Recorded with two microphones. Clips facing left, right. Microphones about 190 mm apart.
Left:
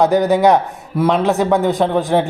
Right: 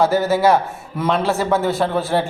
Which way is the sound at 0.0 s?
15° left (ahead or behind).